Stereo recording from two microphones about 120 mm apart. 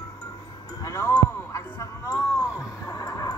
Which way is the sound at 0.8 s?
25° left (ahead or behind).